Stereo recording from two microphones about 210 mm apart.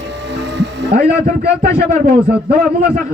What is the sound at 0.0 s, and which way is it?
Music, 55° right (ahead or behind).